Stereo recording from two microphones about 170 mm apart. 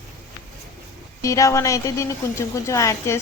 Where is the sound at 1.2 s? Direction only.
20° left (ahead or behind).